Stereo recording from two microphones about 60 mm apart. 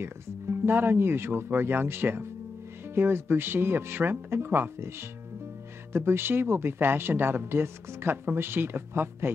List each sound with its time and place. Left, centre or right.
0.0 s speech: right